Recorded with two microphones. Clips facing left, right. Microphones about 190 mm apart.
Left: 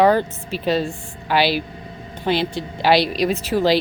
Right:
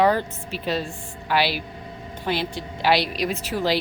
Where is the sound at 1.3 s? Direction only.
25° left (ahead or behind).